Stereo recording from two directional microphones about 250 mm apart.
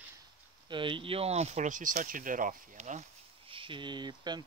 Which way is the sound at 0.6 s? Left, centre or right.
Centre.